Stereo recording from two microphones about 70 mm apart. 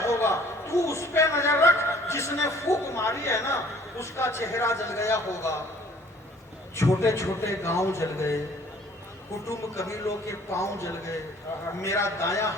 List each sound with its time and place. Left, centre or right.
0.0 s a man's voice: left
6.7 s a man's voice: left
9.5 s a man's voice: left